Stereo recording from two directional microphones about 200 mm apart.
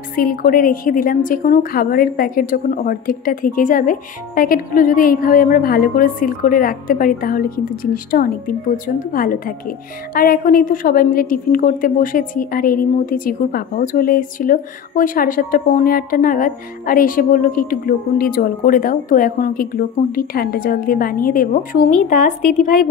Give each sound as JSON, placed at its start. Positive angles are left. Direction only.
{"t": 0.1, "sound": "a woman's voice", "side_deg": 45}